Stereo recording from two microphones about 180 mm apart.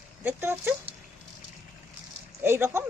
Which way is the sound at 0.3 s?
10° right (ahead or behind).